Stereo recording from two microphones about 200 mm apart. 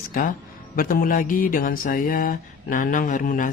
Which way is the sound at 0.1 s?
45° left (ahead or behind).